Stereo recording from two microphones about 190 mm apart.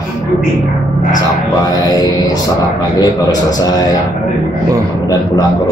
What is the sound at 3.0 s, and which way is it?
Speech, 20° left (ahead or behind).